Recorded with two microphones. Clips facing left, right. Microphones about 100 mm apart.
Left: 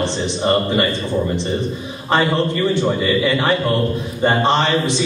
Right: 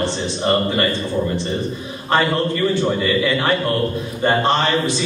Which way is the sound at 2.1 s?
20° left (ahead or behind).